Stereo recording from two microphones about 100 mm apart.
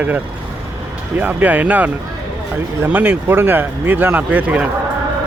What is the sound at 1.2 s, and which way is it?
Speech, 15° right (ahead or behind).